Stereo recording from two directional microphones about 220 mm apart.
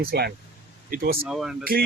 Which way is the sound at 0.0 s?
45° right (ahead or behind).